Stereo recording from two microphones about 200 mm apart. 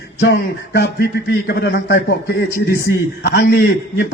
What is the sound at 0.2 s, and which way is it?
A man's voice, 55° left (ahead or behind).